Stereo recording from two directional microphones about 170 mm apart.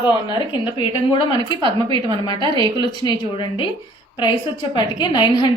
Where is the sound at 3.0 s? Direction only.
25° left (ahead or behind).